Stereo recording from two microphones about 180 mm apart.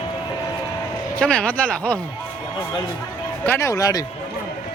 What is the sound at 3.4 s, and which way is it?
Speech, 15° left (ahead or behind).